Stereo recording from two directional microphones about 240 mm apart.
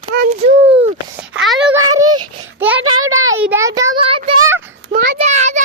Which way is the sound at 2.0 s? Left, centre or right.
Centre.